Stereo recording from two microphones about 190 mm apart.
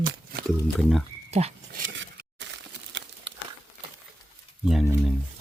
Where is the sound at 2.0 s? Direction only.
70° right (ahead or behind).